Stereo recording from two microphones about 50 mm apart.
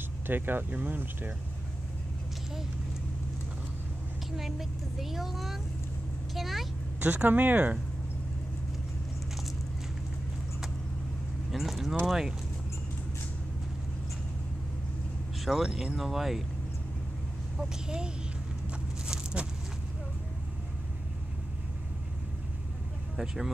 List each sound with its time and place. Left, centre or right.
0.3 s speech: right
4.4 s speech: centre
6.3 s vehicle: centre
7.0 s speech: right
11.5 s speech: centre
15.4 s speech: centre
17.6 s speech: centre
23.1 s speech: centre